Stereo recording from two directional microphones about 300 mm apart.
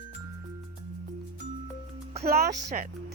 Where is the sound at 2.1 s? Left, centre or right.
Right.